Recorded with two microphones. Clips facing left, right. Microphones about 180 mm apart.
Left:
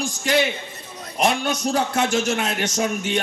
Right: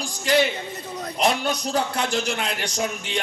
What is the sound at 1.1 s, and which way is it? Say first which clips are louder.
A man's voice: left 2 dB; 45° left (ahead or behind).